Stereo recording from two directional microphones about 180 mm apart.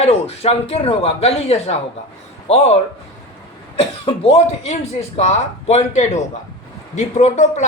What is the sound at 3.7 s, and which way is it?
A man's voice, 35° left (ahead or behind).